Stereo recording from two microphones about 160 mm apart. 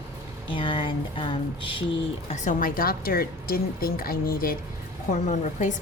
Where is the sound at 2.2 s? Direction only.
55° left (ahead or behind).